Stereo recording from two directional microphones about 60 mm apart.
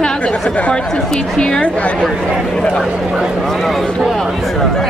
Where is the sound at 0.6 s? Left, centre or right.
Left.